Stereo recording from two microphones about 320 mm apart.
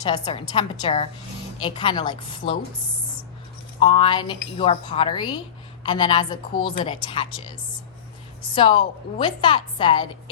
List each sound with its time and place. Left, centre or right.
0.0 s a woman's voice: centre
3.8 s a woman's voice: centre
8.5 s a woman's voice: centre